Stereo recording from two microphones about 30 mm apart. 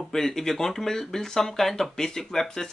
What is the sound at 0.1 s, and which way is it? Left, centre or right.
Speech, centre.